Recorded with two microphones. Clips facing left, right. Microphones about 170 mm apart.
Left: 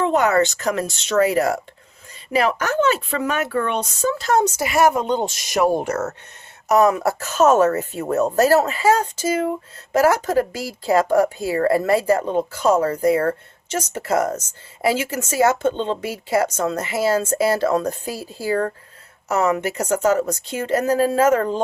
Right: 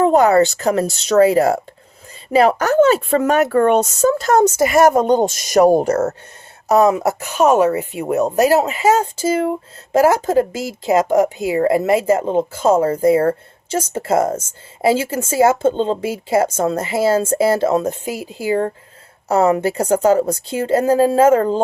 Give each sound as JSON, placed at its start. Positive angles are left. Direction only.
{"t": 0.0, "sound": "speech", "side_deg": -35}
{"t": 19.3, "sound": "speech", "side_deg": -30}